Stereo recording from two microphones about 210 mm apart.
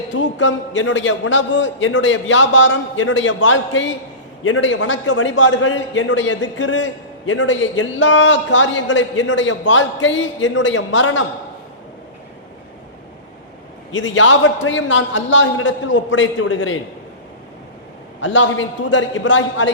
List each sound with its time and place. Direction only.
0.1 s a man's voice: 60° left (ahead or behind)
13.9 s a man's voice: 65° left (ahead or behind)
18.2 s a man's voice: 65° left (ahead or behind)